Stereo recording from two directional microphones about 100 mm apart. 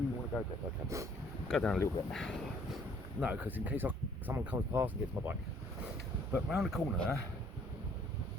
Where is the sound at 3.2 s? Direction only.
15° right (ahead or behind).